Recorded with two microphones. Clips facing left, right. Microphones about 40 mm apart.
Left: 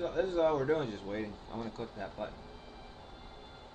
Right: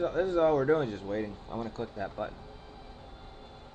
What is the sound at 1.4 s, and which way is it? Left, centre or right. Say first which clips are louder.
Speech: right 4 dB; right.